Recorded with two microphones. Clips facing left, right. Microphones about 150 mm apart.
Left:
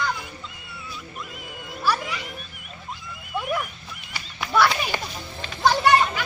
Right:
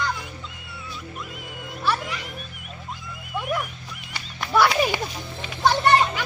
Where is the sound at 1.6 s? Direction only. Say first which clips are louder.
Left 1 dB; centre (ahead or behind).